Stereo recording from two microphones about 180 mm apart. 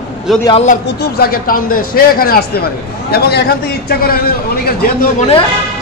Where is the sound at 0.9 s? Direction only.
55° left (ahead or behind).